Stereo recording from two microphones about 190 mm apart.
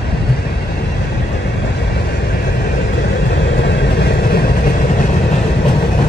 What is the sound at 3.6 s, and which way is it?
Vehicle, 65° left (ahead or behind).